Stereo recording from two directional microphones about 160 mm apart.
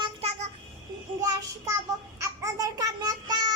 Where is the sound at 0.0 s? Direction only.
40° right (ahead or behind).